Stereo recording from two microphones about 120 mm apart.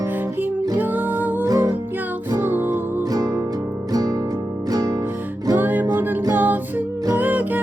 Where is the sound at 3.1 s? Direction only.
30° right (ahead or behind).